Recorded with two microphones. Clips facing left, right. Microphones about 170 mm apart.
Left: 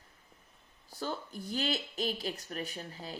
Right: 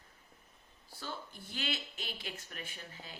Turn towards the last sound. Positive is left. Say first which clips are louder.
# left 8 dB
turn(degrees=40)  # may be behind; listen again after turning